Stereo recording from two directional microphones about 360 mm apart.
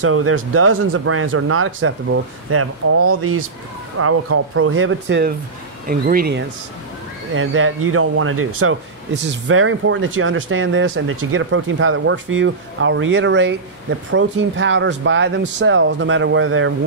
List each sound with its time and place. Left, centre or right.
0.0 s speech: right